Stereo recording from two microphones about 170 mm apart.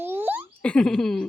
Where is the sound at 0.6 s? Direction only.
5° left (ahead or behind).